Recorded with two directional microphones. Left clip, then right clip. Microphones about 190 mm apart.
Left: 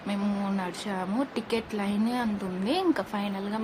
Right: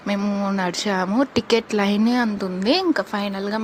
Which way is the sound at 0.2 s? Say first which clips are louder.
Right 8 dB; 30° right (ahead or behind).